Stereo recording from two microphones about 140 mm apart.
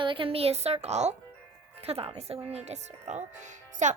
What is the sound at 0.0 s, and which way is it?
A woman's voice, 40° right (ahead or behind).